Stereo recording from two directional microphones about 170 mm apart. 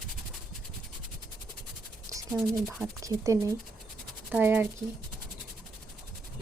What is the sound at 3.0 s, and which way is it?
Speech, 20° right (ahead or behind).